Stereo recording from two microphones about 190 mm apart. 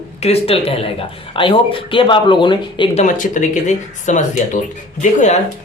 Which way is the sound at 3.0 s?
45° left (ahead or behind).